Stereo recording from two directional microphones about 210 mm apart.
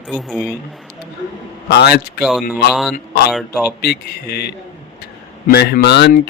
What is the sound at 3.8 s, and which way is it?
Speech, 50° left (ahead or behind).